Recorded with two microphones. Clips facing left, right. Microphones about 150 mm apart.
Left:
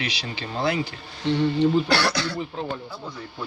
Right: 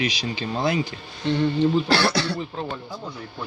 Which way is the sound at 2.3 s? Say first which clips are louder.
Even; 5° left (ahead or behind).